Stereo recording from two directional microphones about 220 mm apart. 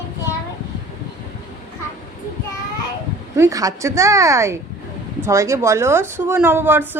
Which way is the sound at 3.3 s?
15° right (ahead or behind).